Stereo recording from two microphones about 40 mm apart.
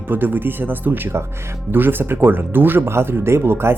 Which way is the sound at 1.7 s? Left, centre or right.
Right.